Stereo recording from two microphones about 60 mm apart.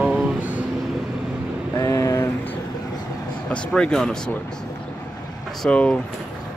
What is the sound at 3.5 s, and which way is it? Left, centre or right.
Speech, centre.